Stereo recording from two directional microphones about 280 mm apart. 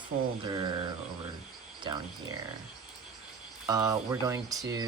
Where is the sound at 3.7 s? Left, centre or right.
Centre.